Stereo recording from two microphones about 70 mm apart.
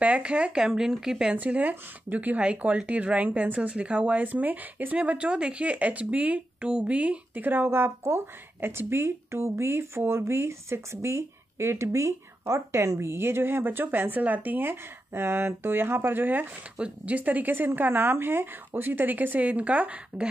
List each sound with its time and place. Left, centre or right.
0.0 s speech: centre
1.3 s speech: right
16.7 s speech: centre